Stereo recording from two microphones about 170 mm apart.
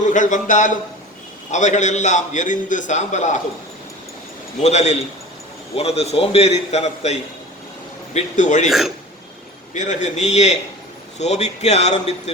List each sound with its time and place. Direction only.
0.0 s a man's voice: 45° left (ahead or behind)
4.6 s a man's voice: 40° left (ahead or behind)
8.6 s speech: centre (ahead or behind)
9.7 s a man's voice: 45° left (ahead or behind)